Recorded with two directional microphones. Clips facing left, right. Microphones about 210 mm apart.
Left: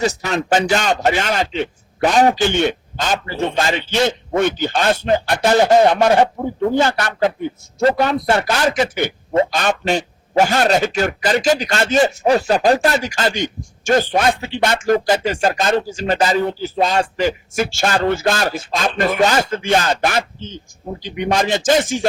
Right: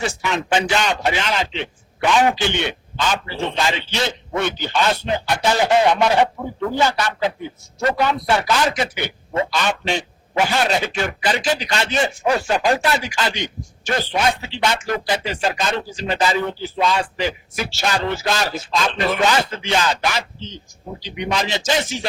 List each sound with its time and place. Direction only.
0.0 s a man's voice: 40° left (ahead or behind)
7.8 s speech: 30° left (ahead or behind)
8.7 s a man's voice: 50° left (ahead or behind)